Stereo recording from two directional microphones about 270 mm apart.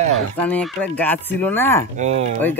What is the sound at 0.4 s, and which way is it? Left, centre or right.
Speech, centre.